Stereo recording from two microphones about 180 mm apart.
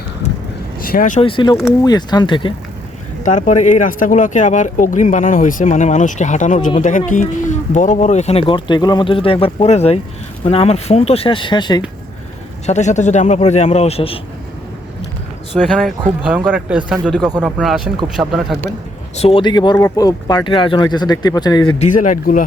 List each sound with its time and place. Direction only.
0.8 s speech: 50° left (ahead or behind)
1.2 s speech: 25° left (ahead or behind)
3.2 s speech: 45° left (ahead or behind); by 11.8 s 25° left (ahead or behind)
12.6 s speech: 40° left (ahead or behind)
15.5 s speech: centre (ahead or behind)
19.1 s speech: 35° left (ahead or behind)
21.8 s speech: 45° left (ahead or behind)